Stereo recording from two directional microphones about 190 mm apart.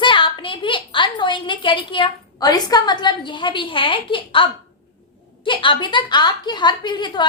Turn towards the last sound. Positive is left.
turn(degrees=25)  # may be behind; listen again after turning